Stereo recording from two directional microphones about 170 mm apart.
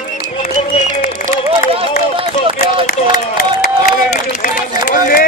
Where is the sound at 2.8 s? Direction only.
50° left (ahead or behind).